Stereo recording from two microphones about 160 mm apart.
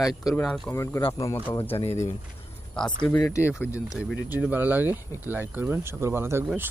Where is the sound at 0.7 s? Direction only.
15° left (ahead or behind).